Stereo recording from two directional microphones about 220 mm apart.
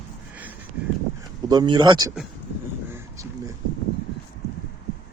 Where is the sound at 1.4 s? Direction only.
20° right (ahead or behind).